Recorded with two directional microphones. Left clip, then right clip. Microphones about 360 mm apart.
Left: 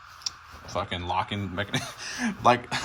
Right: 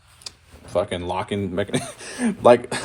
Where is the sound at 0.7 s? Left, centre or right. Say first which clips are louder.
Right 5 dB; centre.